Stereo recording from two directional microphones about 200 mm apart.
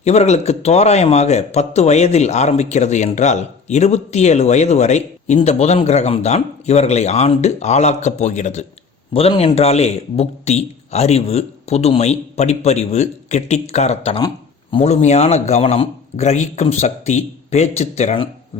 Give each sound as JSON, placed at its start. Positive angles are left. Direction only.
{"t": 0.0, "sound": "a man's voice", "side_deg": 35}